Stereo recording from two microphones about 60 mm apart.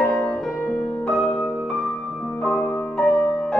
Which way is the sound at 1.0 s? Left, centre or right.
Centre.